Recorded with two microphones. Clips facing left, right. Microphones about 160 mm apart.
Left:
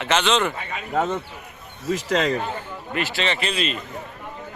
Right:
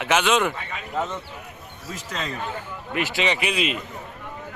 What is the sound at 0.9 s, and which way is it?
Speech, 55° left (ahead or behind).